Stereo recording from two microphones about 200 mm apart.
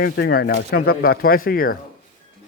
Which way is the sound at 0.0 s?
50° left (ahead or behind).